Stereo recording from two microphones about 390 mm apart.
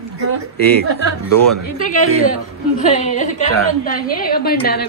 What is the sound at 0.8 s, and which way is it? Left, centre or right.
Speech, right.